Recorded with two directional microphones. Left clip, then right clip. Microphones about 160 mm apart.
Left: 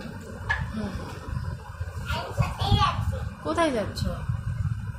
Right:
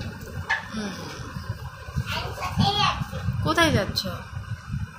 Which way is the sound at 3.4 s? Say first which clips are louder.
Right 3 dB; centre (ahead or behind).